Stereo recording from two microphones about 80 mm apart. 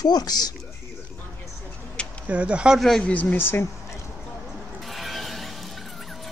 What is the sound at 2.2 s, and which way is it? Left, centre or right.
Speech, centre.